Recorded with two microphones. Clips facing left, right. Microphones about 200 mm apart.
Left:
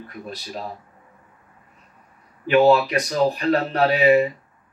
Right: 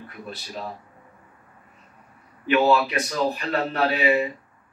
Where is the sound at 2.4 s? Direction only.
40° left (ahead or behind).